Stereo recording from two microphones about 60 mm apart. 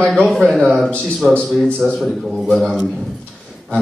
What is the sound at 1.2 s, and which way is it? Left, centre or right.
Speech, left.